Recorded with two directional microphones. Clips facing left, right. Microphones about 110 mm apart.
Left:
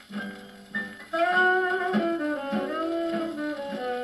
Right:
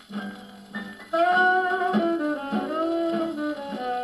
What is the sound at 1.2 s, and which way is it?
Music, 20° right (ahead or behind).